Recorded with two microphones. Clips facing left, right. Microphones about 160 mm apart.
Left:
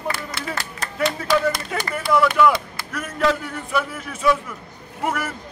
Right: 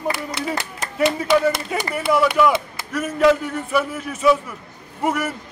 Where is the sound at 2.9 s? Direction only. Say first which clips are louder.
Right 5 dB; 5° right (ahead or behind).